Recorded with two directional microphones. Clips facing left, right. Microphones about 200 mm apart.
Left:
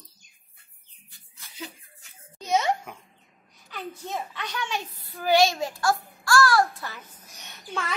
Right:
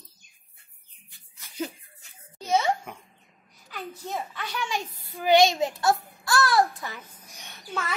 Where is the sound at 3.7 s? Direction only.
5° right (ahead or behind).